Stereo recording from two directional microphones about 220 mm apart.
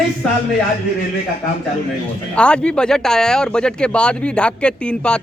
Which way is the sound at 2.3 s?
5° left (ahead or behind).